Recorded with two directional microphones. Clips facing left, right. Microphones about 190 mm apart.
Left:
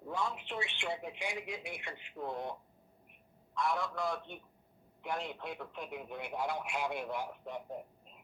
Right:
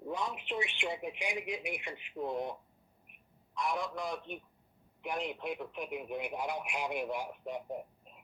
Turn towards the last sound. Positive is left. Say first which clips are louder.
# right 2 dB
turn(degrees=-15)  # may be behind; listen again after turning